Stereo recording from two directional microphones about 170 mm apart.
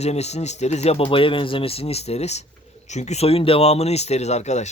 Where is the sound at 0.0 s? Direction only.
40° left (ahead or behind).